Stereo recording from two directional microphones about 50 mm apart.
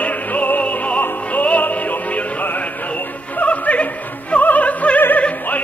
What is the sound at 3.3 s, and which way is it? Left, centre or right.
Opera, left.